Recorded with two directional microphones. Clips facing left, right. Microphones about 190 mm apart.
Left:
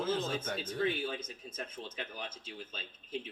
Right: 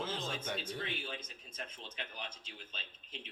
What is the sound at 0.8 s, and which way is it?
Speech, 45° left (ahead or behind).